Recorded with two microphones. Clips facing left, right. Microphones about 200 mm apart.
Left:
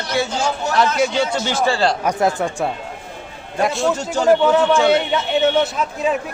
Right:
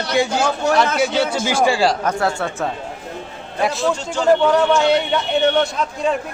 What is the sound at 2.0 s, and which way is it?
Speech, 15° left (ahead or behind).